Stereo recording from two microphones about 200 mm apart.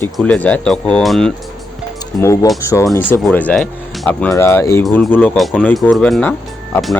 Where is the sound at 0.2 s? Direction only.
5° left (ahead or behind).